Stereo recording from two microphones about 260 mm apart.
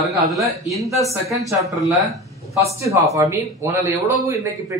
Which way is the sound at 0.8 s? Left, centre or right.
Centre.